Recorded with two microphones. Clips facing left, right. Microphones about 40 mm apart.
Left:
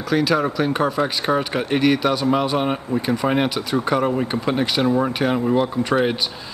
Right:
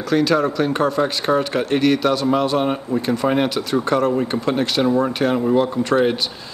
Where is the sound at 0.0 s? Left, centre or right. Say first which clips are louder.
Right 2 dB; centre.